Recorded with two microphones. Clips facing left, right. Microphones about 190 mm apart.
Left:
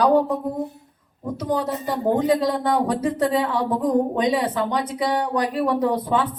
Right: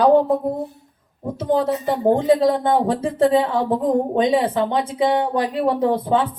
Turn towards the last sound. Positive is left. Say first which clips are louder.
# right 2 dB
turn(degrees=-25)  # may be behind; listen again after turning